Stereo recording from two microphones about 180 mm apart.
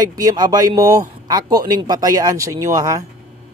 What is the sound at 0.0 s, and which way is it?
A man's voice, 20° right (ahead or behind).